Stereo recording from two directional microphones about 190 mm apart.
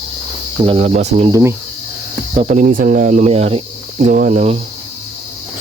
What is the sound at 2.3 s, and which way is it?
Speech, 35° right (ahead or behind).